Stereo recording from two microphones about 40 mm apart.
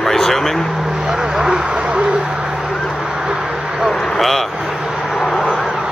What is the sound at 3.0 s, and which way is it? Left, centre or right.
Vehicle, centre.